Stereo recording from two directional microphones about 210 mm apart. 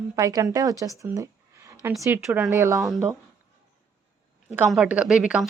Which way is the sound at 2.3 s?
Centre (ahead or behind).